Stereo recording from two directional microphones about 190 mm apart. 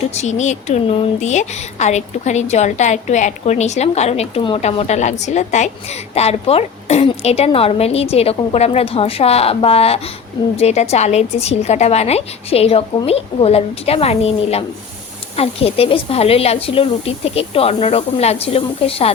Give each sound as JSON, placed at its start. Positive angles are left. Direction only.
{"t": 0.1, "sound": "speech", "side_deg": 35}